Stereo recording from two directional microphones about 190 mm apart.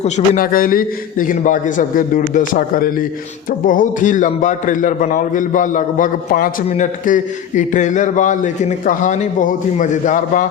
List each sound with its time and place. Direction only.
0.0 s a man's voice: 45° left (ahead or behind)